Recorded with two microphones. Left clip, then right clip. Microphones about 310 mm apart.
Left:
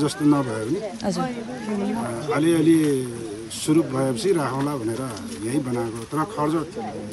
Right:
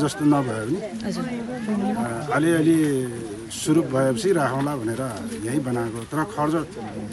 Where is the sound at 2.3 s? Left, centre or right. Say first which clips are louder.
Left 1 dB; centre.